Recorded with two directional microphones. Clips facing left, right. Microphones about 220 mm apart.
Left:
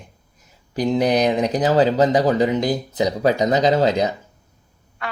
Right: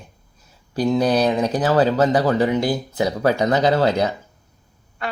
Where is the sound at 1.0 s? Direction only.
15° left (ahead or behind).